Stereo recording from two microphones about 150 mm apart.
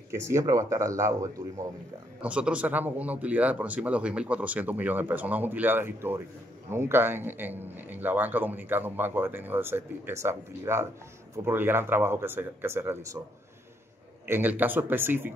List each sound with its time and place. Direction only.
0.1 s a man's voice: 20° right (ahead or behind)
2.2 s a man's voice: 10° right (ahead or behind)
14.2 s a man's voice: 15° right (ahead or behind)